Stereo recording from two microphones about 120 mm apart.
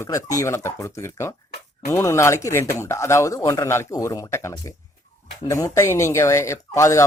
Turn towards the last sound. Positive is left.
turn(degrees=25)  # may be behind; listen again after turning